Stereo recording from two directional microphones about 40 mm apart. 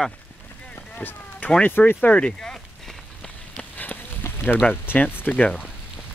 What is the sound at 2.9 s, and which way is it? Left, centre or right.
Run, centre.